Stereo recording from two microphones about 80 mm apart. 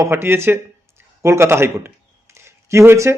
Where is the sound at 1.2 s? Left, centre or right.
Right.